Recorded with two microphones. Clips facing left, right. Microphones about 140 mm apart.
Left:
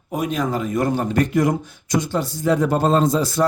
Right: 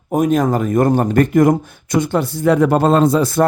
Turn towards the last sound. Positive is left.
turn(degrees=-55)  # may be behind; listen again after turning